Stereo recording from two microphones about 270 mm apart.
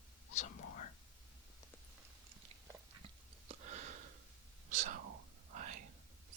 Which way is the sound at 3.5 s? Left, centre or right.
Right.